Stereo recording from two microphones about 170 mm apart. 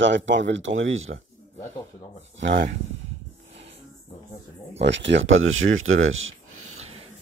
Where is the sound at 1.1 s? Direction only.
75° right (ahead or behind).